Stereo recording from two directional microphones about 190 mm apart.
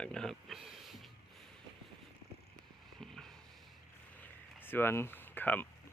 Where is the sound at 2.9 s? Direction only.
5° left (ahead or behind).